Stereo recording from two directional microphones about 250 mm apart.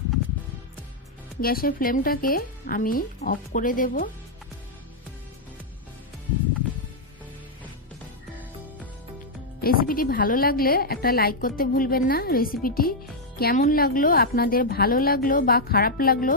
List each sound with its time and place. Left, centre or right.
1.4 s a woman's voice: left
9.6 s a woman's voice: left